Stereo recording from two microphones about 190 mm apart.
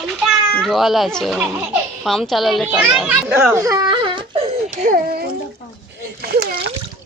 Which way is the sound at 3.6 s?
20° right (ahead or behind).